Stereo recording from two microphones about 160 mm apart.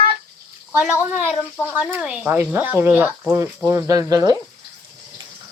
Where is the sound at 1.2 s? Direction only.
10° left (ahead or behind).